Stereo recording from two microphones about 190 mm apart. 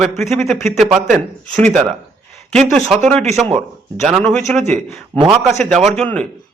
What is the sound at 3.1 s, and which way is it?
Speech, 35° right (ahead or behind).